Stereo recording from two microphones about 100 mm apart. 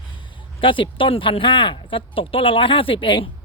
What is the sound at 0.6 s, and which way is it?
Speech, 60° left (ahead or behind).